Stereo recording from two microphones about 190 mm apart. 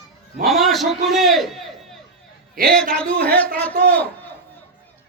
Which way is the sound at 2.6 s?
55° right (ahead or behind).